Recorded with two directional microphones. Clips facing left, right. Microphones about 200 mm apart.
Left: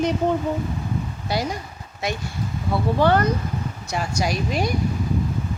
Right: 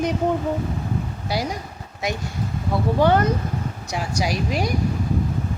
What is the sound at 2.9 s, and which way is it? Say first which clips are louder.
A woman's voice: right 1 dB; 15° right (ahead or behind).